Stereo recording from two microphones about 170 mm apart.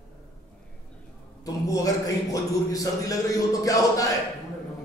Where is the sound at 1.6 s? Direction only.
20° left (ahead or behind).